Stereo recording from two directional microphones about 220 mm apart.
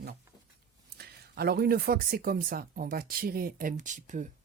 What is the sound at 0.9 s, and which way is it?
Speech, 45° right (ahead or behind).